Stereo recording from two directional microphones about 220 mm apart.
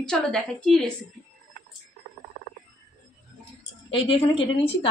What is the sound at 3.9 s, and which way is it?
Speech, 25° left (ahead or behind).